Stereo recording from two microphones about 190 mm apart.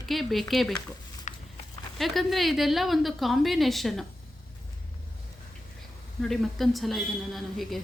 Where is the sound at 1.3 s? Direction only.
40° left (ahead or behind).